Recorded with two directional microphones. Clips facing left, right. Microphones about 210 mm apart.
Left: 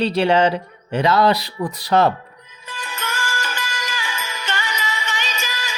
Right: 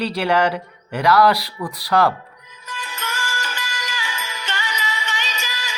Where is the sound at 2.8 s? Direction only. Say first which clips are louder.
Left 2 dB; 55° left (ahead or behind).